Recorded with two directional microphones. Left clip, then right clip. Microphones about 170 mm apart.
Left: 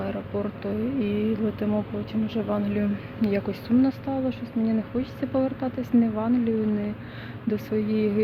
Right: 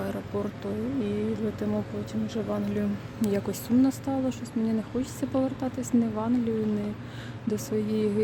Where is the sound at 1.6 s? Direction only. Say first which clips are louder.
Left 3 dB; 10° right (ahead or behind).